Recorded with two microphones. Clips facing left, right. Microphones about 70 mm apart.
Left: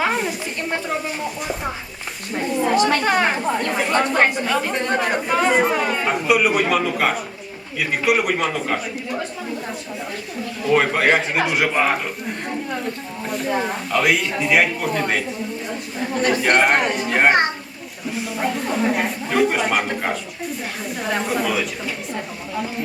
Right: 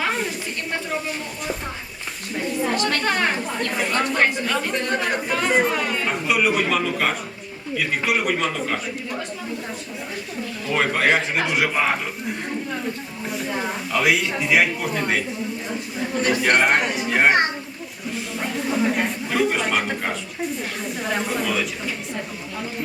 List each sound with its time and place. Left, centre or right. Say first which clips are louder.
0.0 s a sound: left 3 dB; centre
2.6 s chatter: left 6 dB; centre
4.0 s a woman's voice: left 3 dB; left
4.4 s a man's voice: left 3 dB; centre
4.8 s a woman's voice: left 3 dB; left
5.1 s a man's voice: left 3 dB; centre
10.7 s a man's voice: left 3 dB; centre
13.5 s a man's voice: left 4 dB; centre
16.4 s a man's voice: left 2 dB; centre